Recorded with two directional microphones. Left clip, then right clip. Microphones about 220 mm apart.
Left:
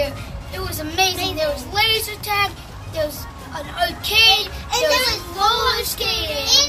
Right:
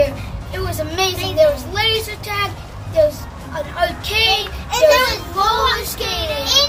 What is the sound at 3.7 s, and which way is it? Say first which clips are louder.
Child singing: left 1 dB; 15° left (ahead or behind).